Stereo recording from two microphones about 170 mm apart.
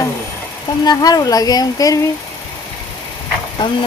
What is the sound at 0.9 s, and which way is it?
Speech, 20° left (ahead or behind).